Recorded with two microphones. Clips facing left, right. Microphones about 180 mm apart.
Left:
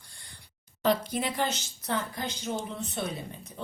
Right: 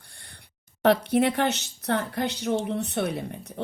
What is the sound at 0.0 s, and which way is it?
A woman's voice, 60° right (ahead or behind).